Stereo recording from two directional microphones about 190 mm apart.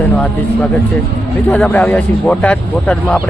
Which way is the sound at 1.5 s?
5° left (ahead or behind).